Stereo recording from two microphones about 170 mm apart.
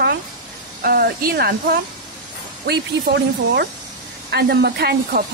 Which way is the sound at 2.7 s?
75° right (ahead or behind).